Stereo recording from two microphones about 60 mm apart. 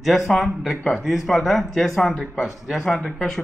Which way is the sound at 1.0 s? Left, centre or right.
Centre.